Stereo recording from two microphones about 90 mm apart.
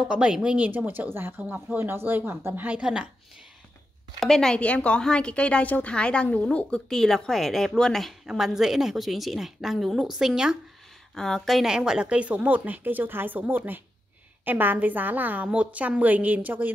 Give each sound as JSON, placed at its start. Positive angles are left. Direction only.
{"t": 0.1, "sound": "speech", "side_deg": -10}
{"t": 4.2, "sound": "a woman's voice", "side_deg": 5}
{"t": 6.9, "sound": "a woman's voice", "side_deg": 5}
{"t": 11.1, "sound": "speech", "side_deg": 5}